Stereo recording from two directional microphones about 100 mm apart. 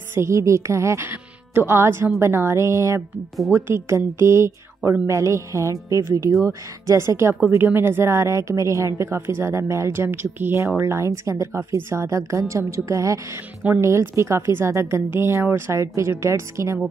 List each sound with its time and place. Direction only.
0.1 s a woman's voice: 30° right (ahead or behind)